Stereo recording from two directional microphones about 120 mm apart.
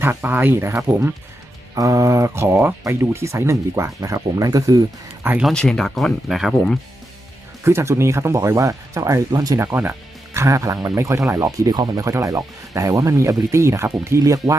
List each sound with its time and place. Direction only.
0.0 s speech: 15° right (ahead or behind)
5.5 s speech: 5° left (ahead or behind)
7.6 s speech: 20° right (ahead or behind)